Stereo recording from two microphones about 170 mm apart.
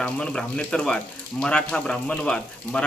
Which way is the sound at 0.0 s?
5° left (ahead or behind).